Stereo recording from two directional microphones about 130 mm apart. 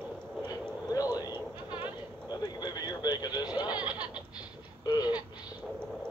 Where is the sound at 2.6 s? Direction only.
30° left (ahead or behind).